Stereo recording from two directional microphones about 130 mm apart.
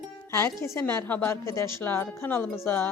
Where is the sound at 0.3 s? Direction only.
20° left (ahead or behind).